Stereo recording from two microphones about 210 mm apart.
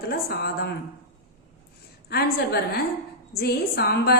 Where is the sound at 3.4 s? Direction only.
50° left (ahead or behind).